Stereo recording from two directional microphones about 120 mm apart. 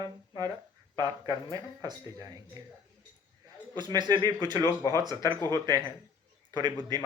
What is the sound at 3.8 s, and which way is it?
Speech, 35° right (ahead or behind).